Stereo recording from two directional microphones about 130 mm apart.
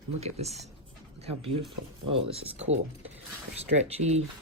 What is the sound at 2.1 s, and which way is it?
Speech, 50° right (ahead or behind).